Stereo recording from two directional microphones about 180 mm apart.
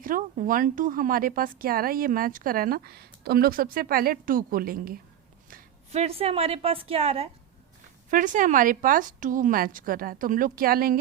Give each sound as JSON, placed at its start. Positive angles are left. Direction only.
{"t": 0.0, "sound": "speech", "side_deg": -50}
{"t": 5.9, "sound": "a woman's voice", "side_deg": -35}
{"t": 8.1, "sound": "speech", "side_deg": -45}